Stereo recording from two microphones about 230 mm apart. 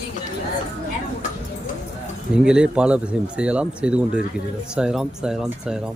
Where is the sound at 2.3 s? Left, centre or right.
Centre.